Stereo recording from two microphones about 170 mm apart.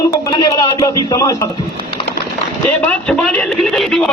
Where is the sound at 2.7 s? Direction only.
5° left (ahead or behind).